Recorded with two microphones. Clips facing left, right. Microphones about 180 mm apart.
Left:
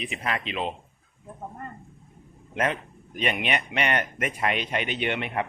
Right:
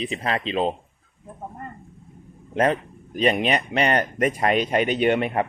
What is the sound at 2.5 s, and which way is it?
Speech, 35° right (ahead or behind).